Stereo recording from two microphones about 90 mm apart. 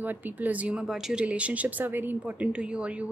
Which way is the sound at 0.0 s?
20° right (ahead or behind).